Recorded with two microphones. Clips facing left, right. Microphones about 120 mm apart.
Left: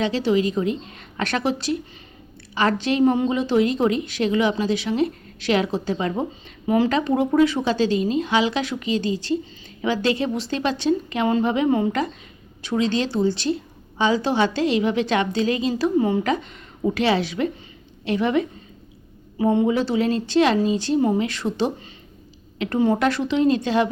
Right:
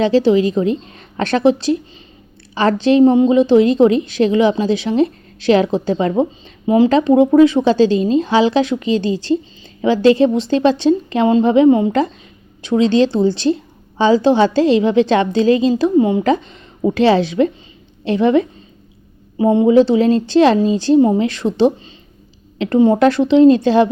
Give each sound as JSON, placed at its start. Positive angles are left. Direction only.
{"t": 0.0, "sound": "a woman's voice", "side_deg": -30}
{"t": 2.6, "sound": "a woman's voice", "side_deg": -30}
{"t": 15.7, "sound": "a woman's voice", "side_deg": -20}
{"t": 16.2, "sound": "a woman's voice", "side_deg": -30}